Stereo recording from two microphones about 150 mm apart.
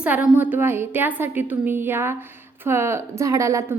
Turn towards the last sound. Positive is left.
turn(degrees=-20)  # may be behind; listen again after turning